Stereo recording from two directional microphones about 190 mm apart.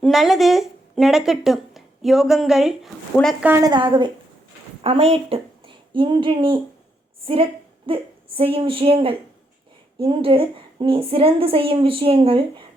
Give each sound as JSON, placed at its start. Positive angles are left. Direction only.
{"t": 0.0, "sound": "speech", "side_deg": 0}
{"t": 3.4, "sound": "a woman's voice", "side_deg": -10}
{"t": 3.7, "sound": "a woman's voice", "side_deg": -25}
{"t": 7.9, "sound": "a woman's voice", "side_deg": -25}